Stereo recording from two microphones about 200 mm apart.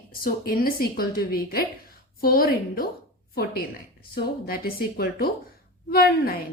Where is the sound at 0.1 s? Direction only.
45° left (ahead or behind).